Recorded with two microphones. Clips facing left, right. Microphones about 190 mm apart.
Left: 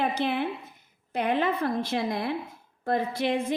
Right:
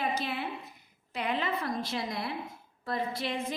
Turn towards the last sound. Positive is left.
turn(degrees=60)  # may be behind; listen again after turning